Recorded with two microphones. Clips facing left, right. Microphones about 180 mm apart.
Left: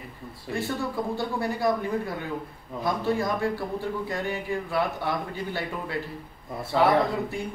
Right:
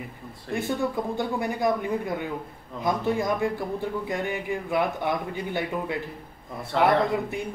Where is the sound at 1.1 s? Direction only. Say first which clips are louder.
Right 1 dB; 20° right (ahead or behind).